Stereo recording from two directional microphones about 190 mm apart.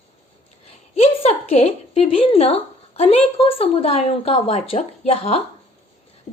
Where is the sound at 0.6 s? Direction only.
30° left (ahead or behind).